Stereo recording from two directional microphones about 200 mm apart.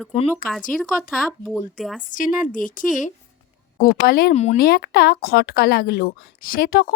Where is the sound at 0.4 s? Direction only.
45° left (ahead or behind).